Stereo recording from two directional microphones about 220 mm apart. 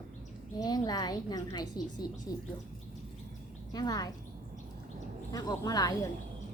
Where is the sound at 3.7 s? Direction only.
15° left (ahead or behind).